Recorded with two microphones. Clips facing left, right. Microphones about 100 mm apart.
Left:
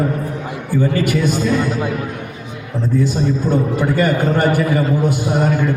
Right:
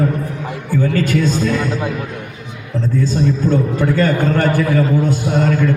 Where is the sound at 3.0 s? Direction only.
15° left (ahead or behind).